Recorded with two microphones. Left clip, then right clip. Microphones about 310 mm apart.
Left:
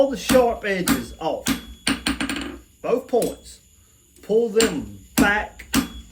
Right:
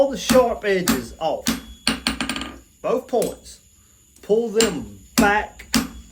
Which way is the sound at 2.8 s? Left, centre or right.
Centre.